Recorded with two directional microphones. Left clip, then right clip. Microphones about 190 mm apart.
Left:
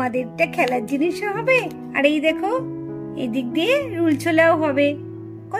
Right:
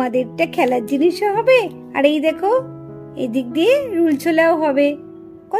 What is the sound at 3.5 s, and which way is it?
A child's voice, 40° right (ahead or behind).